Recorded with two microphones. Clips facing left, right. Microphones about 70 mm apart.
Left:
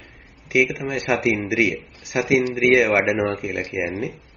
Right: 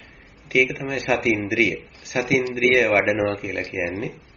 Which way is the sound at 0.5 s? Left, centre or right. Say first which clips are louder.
Left 1 dB; centre.